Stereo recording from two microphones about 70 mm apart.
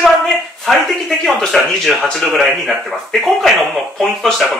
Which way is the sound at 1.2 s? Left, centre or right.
Centre.